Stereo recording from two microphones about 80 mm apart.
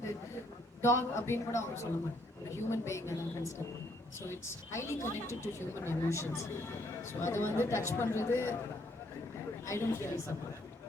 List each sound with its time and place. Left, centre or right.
0.8 s a woman's voice: left
9.6 s a woman's voice: left